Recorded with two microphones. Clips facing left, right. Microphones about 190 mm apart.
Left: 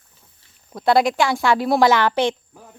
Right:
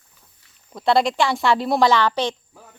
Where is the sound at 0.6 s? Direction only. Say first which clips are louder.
Left 2 dB; centre (ahead or behind).